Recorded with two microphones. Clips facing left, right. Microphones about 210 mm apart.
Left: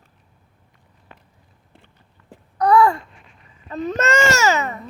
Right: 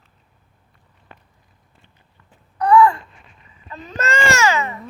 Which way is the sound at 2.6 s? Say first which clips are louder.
Right 1 dB; 40° left (ahead or behind).